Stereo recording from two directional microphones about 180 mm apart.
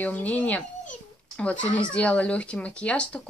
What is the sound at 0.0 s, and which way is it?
A child's voice, 10° left (ahead or behind).